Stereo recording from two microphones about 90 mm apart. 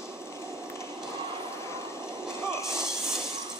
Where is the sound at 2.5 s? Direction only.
35° left (ahead or behind).